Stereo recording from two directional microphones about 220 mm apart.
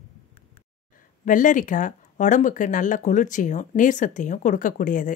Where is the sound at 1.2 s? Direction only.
35° left (ahead or behind).